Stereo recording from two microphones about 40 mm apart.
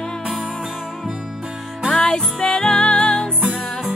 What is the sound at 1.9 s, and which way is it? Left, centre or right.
Music, centre.